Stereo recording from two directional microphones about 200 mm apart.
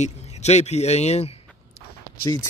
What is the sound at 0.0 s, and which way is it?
Speech, 35° left (ahead or behind).